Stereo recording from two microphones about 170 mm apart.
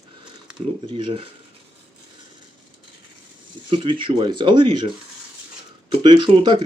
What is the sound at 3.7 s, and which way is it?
Speech, 30° right (ahead or behind).